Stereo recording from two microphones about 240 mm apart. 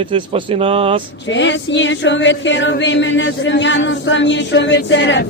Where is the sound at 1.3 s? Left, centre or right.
Left.